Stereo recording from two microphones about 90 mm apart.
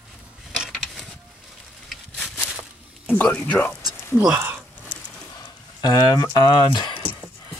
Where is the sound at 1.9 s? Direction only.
Centre (ahead or behind).